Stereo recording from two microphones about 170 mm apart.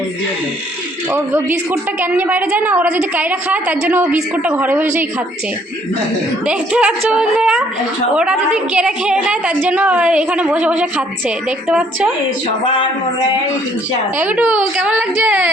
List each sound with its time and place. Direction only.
1.1 s a woman's voice: 15° right (ahead or behind)
6.4 s a woman's voice: 5° right (ahead or behind)
14.2 s a woman's voice: 10° right (ahead or behind)